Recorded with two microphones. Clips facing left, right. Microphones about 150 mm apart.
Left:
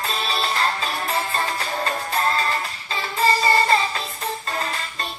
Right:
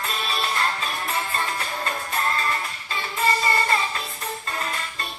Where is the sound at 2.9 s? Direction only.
30° left (ahead or behind).